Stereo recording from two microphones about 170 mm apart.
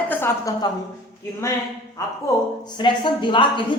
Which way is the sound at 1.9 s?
25° left (ahead or behind).